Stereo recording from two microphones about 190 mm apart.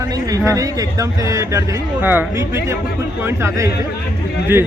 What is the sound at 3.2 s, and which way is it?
Speech, 15° right (ahead or behind).